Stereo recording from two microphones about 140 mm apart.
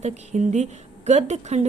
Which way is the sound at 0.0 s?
55° right (ahead or behind).